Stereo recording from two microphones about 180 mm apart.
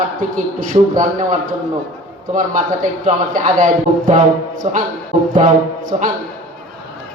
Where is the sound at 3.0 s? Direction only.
45° right (ahead or behind).